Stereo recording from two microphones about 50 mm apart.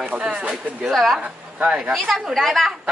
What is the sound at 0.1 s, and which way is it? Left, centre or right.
Speech, centre.